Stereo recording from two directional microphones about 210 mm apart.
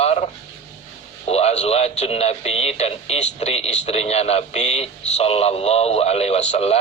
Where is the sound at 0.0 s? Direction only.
30° left (ahead or behind).